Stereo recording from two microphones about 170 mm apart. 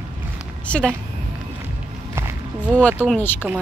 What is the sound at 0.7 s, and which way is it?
Speech, 5° left (ahead or behind).